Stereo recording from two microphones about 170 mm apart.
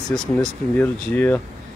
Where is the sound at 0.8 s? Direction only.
10° left (ahead or behind).